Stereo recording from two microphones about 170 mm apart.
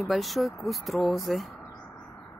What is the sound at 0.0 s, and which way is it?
Speech, centre (ahead or behind).